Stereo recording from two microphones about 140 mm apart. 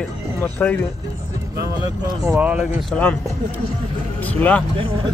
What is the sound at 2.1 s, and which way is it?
Speech, 25° right (ahead or behind).